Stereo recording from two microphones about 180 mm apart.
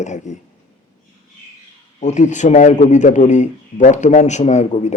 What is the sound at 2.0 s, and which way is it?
A man's voice, 40° left (ahead or behind).